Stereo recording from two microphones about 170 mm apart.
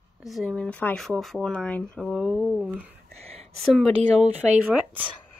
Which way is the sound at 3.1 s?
40° right (ahead or behind).